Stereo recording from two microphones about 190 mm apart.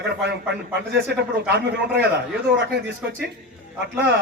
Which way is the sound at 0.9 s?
60° right (ahead or behind).